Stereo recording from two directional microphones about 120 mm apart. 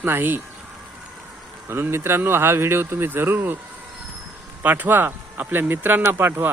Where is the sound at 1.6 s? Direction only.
20° right (ahead or behind).